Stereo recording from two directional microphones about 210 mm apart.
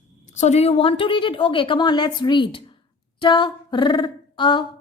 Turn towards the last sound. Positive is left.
turn(degrees=20)  # may be behind; listen again after turning